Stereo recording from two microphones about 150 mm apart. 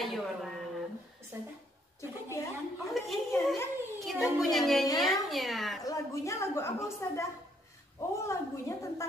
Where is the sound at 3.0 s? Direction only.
Centre (ahead or behind).